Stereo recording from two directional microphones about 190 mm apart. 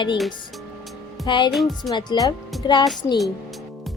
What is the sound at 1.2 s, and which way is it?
Speech, 25° left (ahead or behind).